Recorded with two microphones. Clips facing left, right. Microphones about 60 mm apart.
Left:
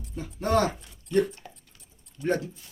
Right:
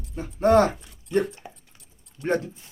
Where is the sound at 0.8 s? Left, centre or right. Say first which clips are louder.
Even; right.